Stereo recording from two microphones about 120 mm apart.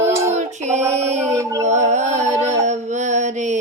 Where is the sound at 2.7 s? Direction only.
80° right.